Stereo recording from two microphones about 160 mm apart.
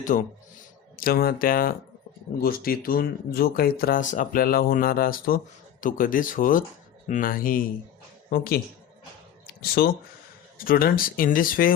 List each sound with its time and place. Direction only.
0.0 s speech: 55° left (ahead or behind)
0.9 s speech: 65° left (ahead or behind)